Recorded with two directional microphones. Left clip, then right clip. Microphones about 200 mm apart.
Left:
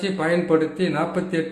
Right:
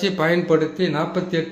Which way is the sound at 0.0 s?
25° right (ahead or behind).